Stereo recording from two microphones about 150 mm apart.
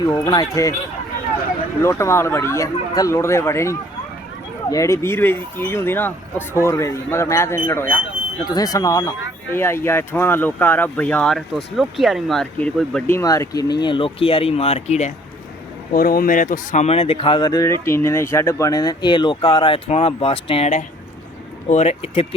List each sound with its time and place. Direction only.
0.0 s speech: 25° left (ahead or behind)
1.8 s speech: 20° left (ahead or behind); by 15.1 s 50° left (ahead or behind)
15.9 s speech: 75° left (ahead or behind); by 20.7 s 40° left (ahead or behind)
21.7 s speech: 45° left (ahead or behind)